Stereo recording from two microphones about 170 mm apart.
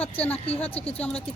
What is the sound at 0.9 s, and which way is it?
Speech, 10° left (ahead or behind).